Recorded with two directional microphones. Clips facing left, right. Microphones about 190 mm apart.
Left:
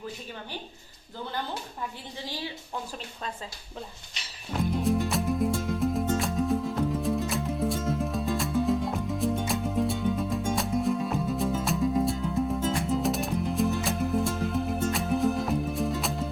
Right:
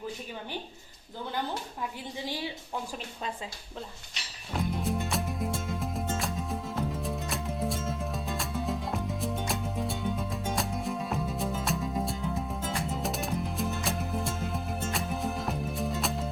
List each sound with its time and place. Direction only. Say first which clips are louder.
2.2 s a woman's voice: right 1 dB; 20° right (ahead or behind)
4.7 s music: left 7 dB; centre (ahead or behind)